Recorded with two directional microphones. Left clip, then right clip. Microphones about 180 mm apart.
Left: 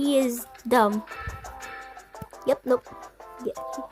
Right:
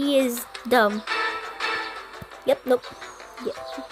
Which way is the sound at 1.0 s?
50° right (ahead or behind).